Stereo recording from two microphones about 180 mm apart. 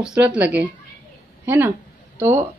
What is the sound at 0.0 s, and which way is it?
A woman's voice, 5° right (ahead or behind).